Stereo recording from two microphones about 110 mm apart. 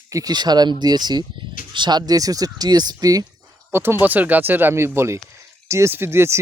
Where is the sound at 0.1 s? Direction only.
35° right (ahead or behind).